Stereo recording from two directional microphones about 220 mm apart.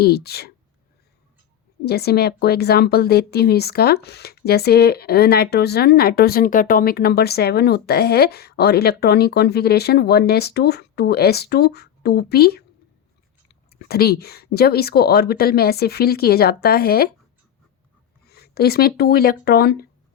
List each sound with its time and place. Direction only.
0.0 s a woman's voice: 45° left (ahead or behind)
1.8 s a woman's voice: 45° left (ahead or behind)
13.7 s a woman's voice: 45° left (ahead or behind)
18.3 s speech: 45° left (ahead or behind)